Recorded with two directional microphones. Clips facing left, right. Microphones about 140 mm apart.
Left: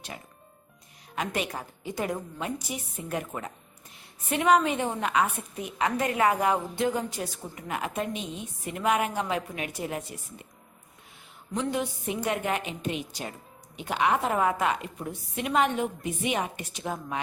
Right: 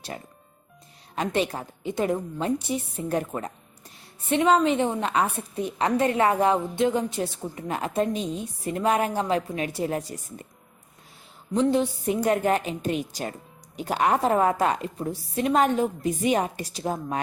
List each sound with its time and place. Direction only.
1.1 s a woman's voice: 30° right (ahead or behind)
11.5 s a woman's voice: 30° right (ahead or behind)